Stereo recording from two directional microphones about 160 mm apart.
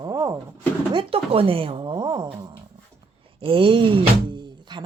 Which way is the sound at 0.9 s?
35° right (ahead or behind).